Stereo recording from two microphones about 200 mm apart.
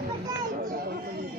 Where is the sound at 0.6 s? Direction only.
50° right (ahead or behind).